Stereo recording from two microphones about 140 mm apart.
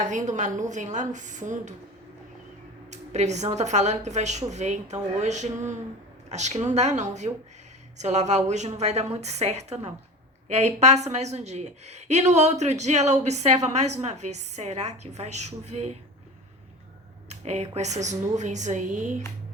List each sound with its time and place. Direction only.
0.0 s a woman's voice: 60° right (ahead or behind)
2.9 s a woman's voice: 55° right (ahead or behind)
17.2 s a woman's voice: 50° right (ahead or behind)